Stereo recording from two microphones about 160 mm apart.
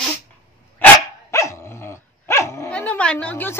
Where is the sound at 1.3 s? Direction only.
20° left (ahead or behind).